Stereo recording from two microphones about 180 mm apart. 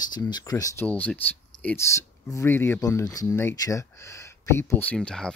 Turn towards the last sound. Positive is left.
turn(degrees=5)  # may be behind; listen again after turning